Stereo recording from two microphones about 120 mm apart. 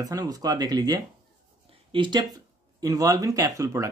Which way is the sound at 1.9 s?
45° right (ahead or behind).